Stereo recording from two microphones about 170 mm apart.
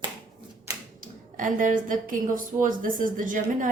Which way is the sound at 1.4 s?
50° right (ahead or behind).